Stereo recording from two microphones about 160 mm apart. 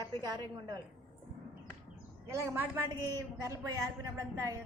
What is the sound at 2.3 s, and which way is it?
A woman's voice, 15° right (ahead or behind).